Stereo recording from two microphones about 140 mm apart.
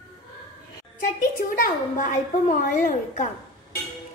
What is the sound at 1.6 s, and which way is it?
A woman's voice, 65° left (ahead or behind).